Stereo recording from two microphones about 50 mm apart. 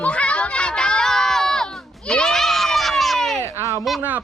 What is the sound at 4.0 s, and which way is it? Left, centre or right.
Speech, right.